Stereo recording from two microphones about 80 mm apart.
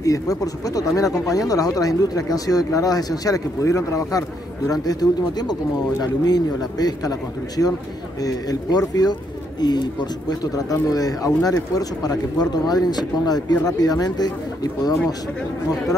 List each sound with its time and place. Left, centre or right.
0.0 s speech: left
4.8 s speech: left
10.4 s speech: left